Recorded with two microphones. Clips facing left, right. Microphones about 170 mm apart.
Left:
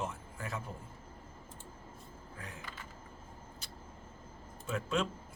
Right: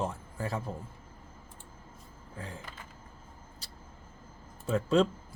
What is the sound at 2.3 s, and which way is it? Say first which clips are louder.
Speech: right 7 dB; 30° right (ahead or behind).